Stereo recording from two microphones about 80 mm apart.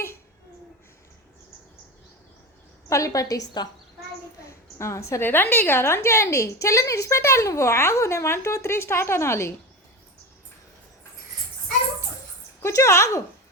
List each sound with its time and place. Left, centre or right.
2.9 s a woman's voice: left
4.8 s a woman's voice: left
5.2 s a woman's voice: left
12.6 s speech: left